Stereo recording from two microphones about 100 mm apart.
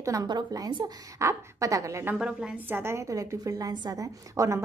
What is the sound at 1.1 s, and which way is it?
A woman's voice, 30° right (ahead or behind).